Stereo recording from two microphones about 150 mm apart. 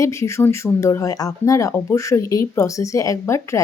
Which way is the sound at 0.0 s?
20° left (ahead or behind).